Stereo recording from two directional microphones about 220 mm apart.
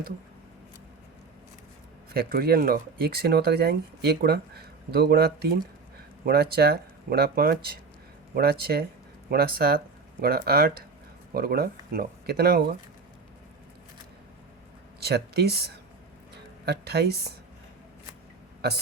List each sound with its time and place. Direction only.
2.1 s speech: 45° right (ahead or behind)
15.0 s speech: 45° right (ahead or behind)